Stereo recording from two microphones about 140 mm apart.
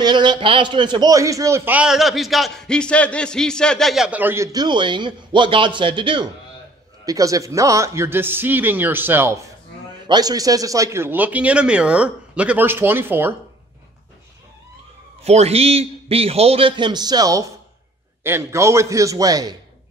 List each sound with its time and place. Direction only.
0.0 s a man's voice: 30° right (ahead or behind)
7.1 s a man's voice: 25° right (ahead or behind)
10.0 s a man's voice: 30° right (ahead or behind)
15.2 s a man's voice: 50° right (ahead or behind); by 19.5 s 25° right (ahead or behind)